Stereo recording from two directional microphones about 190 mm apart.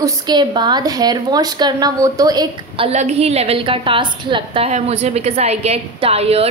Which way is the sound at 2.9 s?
35° right (ahead or behind).